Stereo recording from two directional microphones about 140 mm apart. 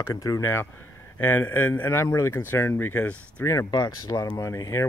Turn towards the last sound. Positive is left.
turn(degrees=25)  # may be behind; listen again after turning